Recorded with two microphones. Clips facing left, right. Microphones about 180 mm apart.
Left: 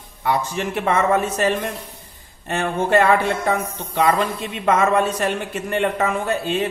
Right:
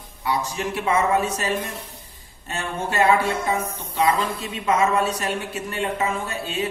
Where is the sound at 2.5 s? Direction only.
60° left (ahead or behind).